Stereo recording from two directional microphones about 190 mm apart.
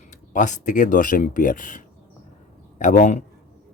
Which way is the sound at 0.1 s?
40° left (ahead or behind).